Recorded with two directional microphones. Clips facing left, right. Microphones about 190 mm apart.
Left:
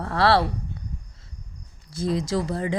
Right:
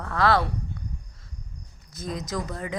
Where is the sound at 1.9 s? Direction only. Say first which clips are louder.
Left 7 dB; 30° left (ahead or behind).